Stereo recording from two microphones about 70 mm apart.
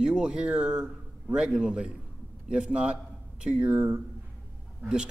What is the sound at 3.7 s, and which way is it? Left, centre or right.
Speech, right.